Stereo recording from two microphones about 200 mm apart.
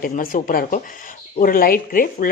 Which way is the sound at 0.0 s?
45° left (ahead or behind).